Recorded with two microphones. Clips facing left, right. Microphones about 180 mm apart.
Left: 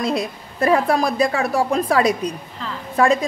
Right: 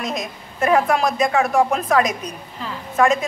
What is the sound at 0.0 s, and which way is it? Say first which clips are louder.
A woman's voice: left 5 dB; 35° left (ahead or behind).